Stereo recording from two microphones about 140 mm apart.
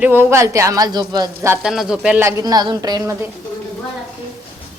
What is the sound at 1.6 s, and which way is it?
Speech, 5° right (ahead or behind).